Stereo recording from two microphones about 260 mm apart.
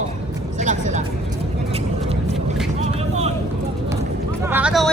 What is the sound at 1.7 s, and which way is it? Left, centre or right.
Vehicle, right.